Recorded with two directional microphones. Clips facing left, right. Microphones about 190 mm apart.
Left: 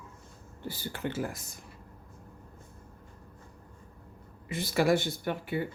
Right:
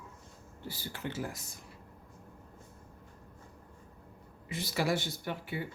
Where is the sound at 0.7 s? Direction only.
55° left (ahead or behind).